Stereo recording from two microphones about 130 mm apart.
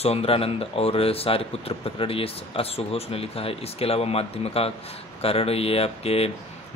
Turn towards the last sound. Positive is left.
turn(degrees=50)  # may be behind; listen again after turning